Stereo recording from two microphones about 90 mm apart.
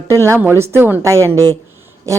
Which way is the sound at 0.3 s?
25° right (ahead or behind).